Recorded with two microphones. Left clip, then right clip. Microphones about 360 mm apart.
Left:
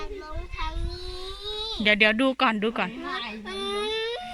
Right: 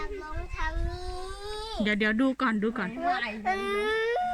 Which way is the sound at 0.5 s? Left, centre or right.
Centre.